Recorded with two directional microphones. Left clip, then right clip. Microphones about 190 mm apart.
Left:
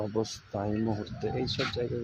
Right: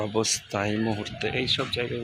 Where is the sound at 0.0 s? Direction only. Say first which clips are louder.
Right 6 dB; 5° right (ahead or behind).